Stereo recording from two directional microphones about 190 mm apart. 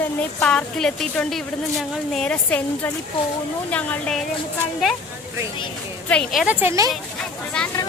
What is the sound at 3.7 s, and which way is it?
Speech, 5° left (ahead or behind).